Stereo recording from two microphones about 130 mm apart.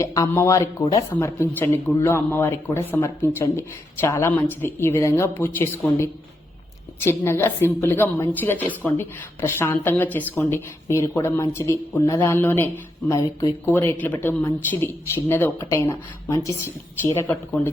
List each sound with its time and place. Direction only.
0.0 s a woman's voice: 25° left (ahead or behind)